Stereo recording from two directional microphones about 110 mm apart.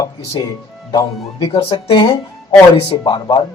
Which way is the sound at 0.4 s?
40° left (ahead or behind).